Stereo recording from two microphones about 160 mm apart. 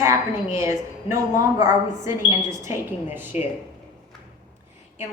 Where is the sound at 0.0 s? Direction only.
20° right (ahead or behind).